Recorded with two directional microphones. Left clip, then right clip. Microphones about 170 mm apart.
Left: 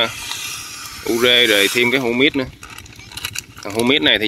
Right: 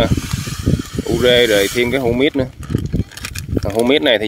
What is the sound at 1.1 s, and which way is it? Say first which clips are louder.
Speech: right 1 dB; 15° right (ahead or behind).